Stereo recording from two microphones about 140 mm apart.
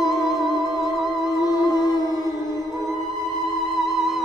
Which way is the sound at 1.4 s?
25° left (ahead or behind).